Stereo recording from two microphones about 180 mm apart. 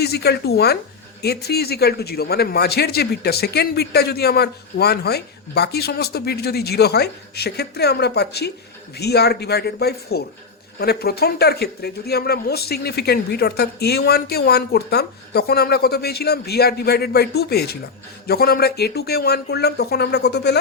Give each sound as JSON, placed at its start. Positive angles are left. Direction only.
{"t": 0.0, "sound": "speech", "side_deg": 60}